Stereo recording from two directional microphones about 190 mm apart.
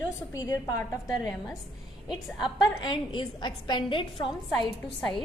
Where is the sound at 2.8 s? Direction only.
25° left (ahead or behind).